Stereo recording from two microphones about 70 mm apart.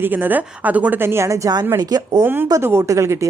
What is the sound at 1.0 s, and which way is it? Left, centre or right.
Speech, right.